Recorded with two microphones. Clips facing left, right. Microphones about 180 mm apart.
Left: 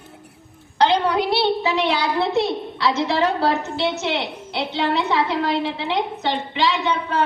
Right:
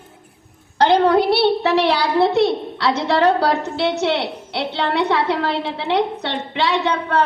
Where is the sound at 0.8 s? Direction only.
50° right (ahead or behind).